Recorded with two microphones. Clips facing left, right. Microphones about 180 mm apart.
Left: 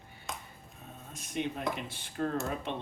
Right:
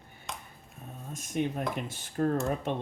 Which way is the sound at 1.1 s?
45° right (ahead or behind).